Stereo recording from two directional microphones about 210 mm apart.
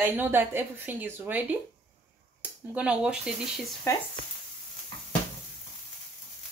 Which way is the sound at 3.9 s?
15° left (ahead or behind).